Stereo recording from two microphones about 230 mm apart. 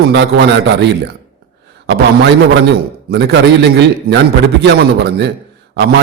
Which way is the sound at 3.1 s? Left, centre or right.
Right.